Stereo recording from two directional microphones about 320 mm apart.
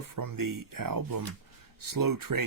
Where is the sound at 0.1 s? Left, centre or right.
Right.